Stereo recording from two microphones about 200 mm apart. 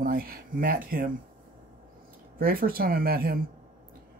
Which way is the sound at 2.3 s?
45° right (ahead or behind).